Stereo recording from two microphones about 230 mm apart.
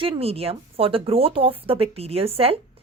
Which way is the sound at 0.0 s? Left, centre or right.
Right.